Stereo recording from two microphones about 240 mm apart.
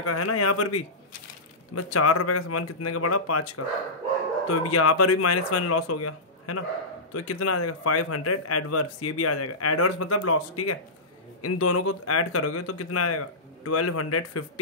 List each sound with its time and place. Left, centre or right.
0.0 s speech: left
1.8 s speech: left